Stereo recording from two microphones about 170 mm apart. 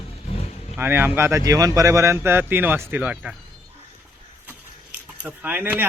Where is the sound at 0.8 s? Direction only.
10° right (ahead or behind).